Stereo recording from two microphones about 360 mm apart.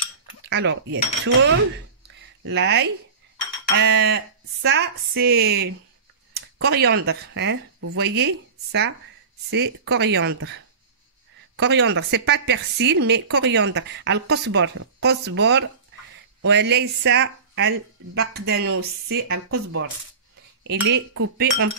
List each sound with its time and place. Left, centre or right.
0.5 s a woman's voice: right
20.6 s a woman's voice: right